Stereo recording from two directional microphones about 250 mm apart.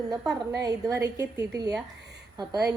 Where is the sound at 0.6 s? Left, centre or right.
Centre.